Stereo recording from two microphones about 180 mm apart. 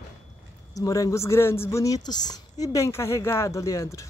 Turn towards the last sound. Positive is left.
turn(degrees=15)  # may be behind; listen again after turning